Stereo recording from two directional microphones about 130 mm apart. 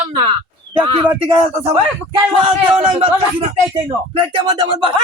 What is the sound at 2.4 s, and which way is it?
Speech, 45° right (ahead or behind).